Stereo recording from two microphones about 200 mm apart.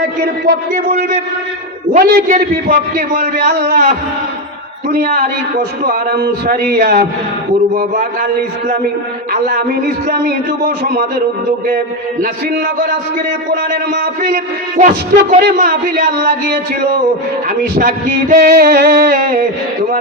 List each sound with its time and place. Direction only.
0.2 s speech: 50° right (ahead or behind)
12.2 s speech: 45° right (ahead or behind)